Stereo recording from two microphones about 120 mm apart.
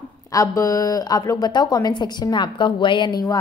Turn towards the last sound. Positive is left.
turn(degrees=35)  # may be behind; listen again after turning